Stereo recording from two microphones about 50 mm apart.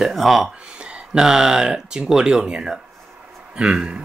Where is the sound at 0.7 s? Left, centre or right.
Centre.